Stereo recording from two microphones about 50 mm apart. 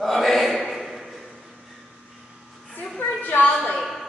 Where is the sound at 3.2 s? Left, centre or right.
Left.